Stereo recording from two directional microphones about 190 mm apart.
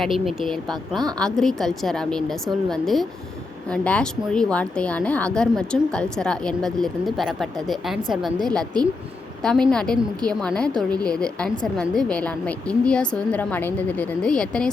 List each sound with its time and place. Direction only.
0.0 s a woman's voice: centre (ahead or behind)